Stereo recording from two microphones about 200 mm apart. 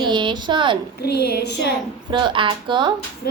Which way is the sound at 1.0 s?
55° left (ahead or behind).